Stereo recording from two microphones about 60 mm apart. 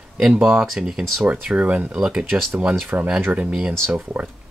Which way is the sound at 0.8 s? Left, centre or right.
Centre.